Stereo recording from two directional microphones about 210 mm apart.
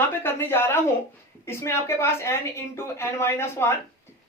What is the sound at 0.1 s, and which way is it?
A woman's voice, 10° left (ahead or behind).